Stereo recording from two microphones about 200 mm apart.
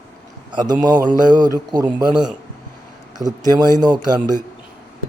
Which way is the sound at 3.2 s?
20° right (ahead or behind).